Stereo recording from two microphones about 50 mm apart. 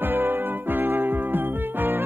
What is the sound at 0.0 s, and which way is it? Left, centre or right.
Music, right.